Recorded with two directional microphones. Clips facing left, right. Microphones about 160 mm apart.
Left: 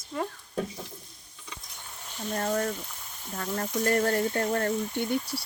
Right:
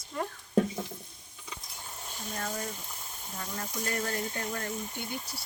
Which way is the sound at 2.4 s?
50° left (ahead or behind).